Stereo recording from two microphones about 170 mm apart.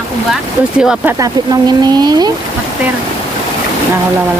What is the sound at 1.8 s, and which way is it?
Speech, 25° right (ahead or behind).